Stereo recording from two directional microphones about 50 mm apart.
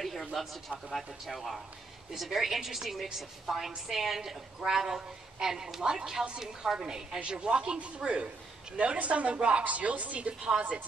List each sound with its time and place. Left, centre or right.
0.0 s a woman's voice: centre; by 10.5 s right